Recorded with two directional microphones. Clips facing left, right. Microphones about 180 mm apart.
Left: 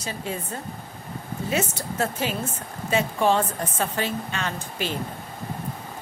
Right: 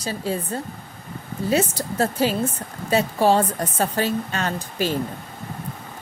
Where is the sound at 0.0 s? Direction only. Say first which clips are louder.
Right 5 dB; 35° right (ahead or behind).